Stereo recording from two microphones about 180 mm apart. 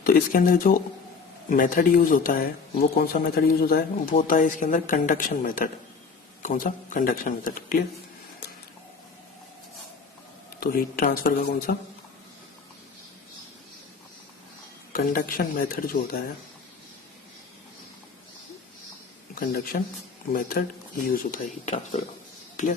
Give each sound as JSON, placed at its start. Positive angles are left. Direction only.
{"t": 0.0, "sound": "speech", "side_deg": 50}
{"t": 10.6, "sound": "speech", "side_deg": 55}
{"t": 14.9, "sound": "speech", "side_deg": 50}
{"t": 19.3, "sound": "speech", "side_deg": 55}